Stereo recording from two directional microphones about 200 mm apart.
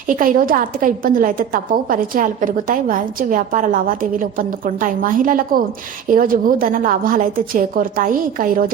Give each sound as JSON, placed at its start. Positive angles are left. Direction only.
{"t": 0.1, "sound": "a woman's voice", "side_deg": -45}